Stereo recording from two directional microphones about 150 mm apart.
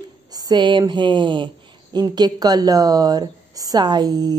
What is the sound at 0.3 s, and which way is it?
A woman's voice, 25° right (ahead or behind).